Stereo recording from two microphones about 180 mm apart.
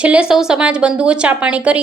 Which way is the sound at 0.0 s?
5° right (ahead or behind).